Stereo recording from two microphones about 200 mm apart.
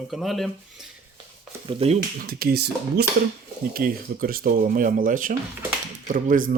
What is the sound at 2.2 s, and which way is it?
Speech, 50° right (ahead or behind).